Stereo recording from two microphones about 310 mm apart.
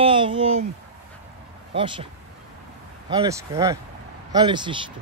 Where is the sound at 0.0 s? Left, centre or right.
Centre.